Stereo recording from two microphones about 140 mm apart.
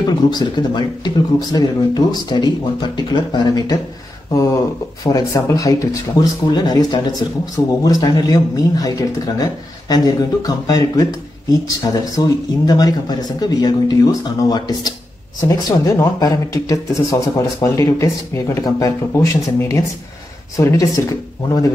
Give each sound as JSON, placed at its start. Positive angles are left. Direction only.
{"t": 0.0, "sound": "speech", "side_deg": 30}